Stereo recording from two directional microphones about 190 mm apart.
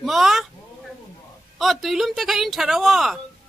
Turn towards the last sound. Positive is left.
turn(degrees=0)  # may be behind; listen again after turning